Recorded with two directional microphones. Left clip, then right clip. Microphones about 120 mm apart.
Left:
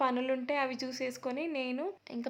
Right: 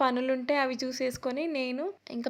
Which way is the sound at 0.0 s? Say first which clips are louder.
Right 4 dB; 35° right (ahead or behind).